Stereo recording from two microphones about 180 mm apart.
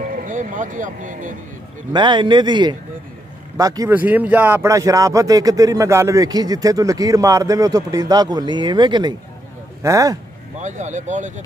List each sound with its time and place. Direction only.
0.0 s speech: 45° right (ahead or behind)
1.9 s speech: 25° right (ahead or behind)
10.6 s speech: 40° right (ahead or behind)